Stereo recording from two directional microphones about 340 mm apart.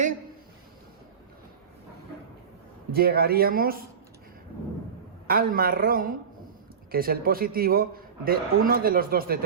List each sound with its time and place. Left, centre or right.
2.9 s a man's voice: right
5.3 s a man's voice: right